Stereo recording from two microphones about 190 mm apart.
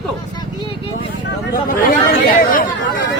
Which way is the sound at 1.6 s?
45° left (ahead or behind).